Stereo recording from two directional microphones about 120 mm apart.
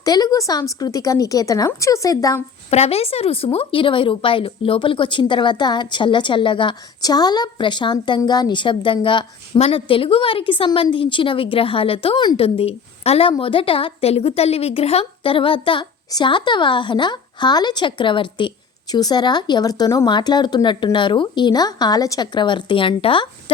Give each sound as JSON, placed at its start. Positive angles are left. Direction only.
{"t": 0.0, "sound": "a woman's voice", "side_deg": 35}
{"t": 2.6, "sound": "a woman's voice", "side_deg": 60}
{"t": 9.6, "sound": "a woman's voice", "side_deg": 55}